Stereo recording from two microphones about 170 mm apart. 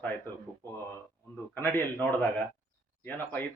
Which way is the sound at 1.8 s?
10° left (ahead or behind).